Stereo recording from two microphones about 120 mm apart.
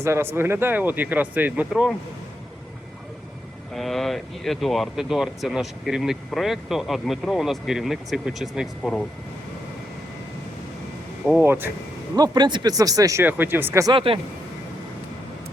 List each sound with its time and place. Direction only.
0.0 s speech: 20° right (ahead or behind)
1.7 s speech: 5° right (ahead or behind)
3.8 s speech: centre (ahead or behind)
11.3 s speech: 15° right (ahead or behind)
12.1 s speech: 35° right (ahead or behind)
13.2 s speech: 15° right (ahead or behind)
13.9 s speech: 50° right (ahead or behind)